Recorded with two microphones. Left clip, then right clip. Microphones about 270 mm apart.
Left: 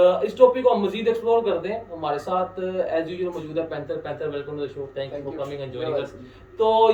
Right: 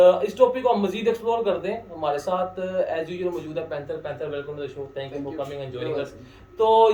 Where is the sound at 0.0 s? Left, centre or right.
Centre.